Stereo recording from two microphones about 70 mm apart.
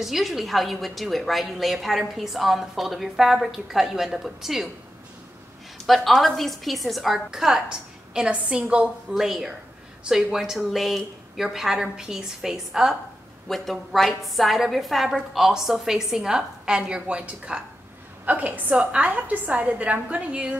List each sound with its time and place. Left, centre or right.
0.0 s a woman's voice: centre
5.8 s a woman's voice: centre